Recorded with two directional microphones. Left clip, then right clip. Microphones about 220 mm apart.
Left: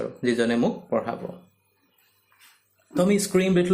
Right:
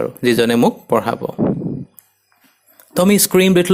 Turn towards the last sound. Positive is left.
turn(degrees=-45)  # may be behind; listen again after turning